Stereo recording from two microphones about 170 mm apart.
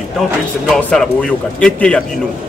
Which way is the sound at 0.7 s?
5° left (ahead or behind).